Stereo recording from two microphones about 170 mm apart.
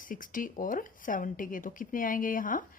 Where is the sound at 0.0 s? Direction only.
55° left (ahead or behind).